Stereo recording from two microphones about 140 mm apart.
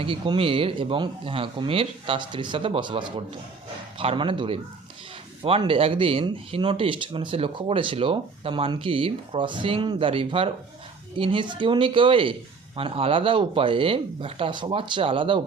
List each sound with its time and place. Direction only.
0.0 s speech: 40° right (ahead or behind)